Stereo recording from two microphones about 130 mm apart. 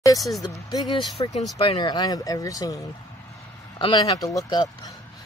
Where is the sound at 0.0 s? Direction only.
25° left (ahead or behind).